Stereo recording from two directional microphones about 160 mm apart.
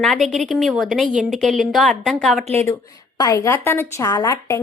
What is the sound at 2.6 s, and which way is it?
A woman's voice, 20° left (ahead or behind).